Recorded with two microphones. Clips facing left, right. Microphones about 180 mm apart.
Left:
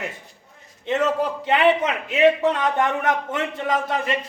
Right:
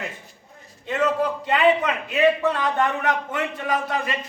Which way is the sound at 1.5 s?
25° left (ahead or behind).